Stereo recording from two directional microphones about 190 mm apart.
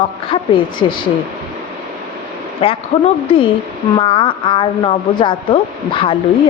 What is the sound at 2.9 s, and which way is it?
Speech, 30° left (ahead or behind).